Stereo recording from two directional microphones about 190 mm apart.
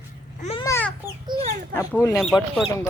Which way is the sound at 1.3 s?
30° right (ahead or behind).